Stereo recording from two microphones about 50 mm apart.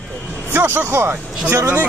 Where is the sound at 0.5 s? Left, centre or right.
Right.